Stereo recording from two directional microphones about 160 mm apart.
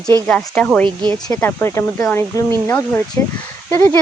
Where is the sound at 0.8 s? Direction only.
30° right (ahead or behind).